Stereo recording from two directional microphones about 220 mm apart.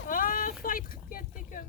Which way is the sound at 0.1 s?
40° left (ahead or behind).